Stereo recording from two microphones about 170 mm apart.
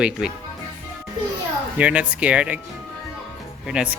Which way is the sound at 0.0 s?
5° right (ahead or behind).